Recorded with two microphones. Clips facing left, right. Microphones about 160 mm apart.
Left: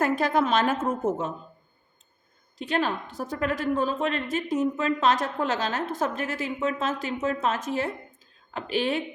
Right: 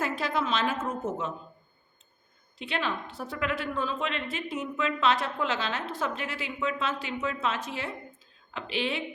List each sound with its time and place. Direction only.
0.0 s a woman's voice: 50° left (ahead or behind)
2.6 s a woman's voice: 40° left (ahead or behind)